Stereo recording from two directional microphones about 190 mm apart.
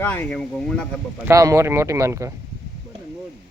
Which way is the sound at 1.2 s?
15° right (ahead or behind).